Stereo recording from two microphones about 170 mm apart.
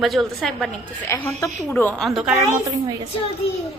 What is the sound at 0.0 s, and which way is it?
Speech, centre (ahead or behind).